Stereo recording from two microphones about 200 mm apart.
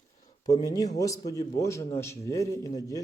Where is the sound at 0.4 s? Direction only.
20° left (ahead or behind).